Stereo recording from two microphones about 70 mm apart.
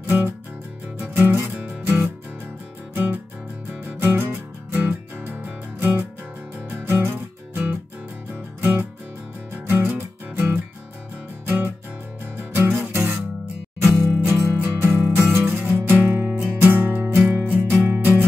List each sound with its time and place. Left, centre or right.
0.0 s music: right
9.7 s music: right
13.7 s music: right